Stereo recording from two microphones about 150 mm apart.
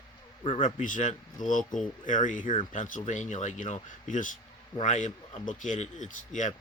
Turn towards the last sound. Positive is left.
turn(degrees=55)  # may be behind; listen again after turning